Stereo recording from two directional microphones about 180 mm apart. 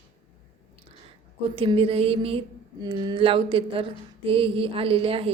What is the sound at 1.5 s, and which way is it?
Music, 30° right (ahead or behind).